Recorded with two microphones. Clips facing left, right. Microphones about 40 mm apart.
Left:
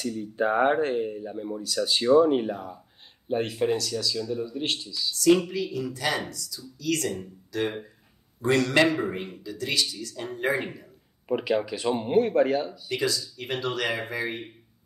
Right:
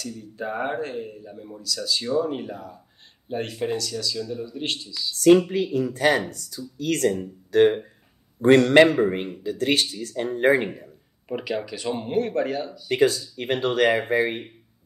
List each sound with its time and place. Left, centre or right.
0.0 s speech: left
3.3 s speech: centre
5.1 s speech: right
11.2 s speech: centre
12.9 s speech: right